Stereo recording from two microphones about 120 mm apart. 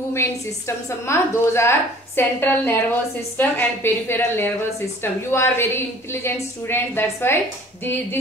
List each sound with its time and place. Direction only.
0.7 s a woman's voice: 20° left (ahead or behind)